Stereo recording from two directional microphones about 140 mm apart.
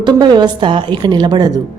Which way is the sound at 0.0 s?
30° right (ahead or behind).